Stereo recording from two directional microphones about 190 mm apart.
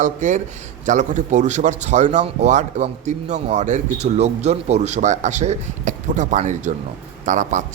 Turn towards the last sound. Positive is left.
turn(degrees=-40)  # may be behind; listen again after turning